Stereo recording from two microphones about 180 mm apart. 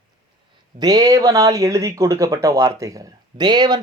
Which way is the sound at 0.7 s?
20° right (ahead or behind).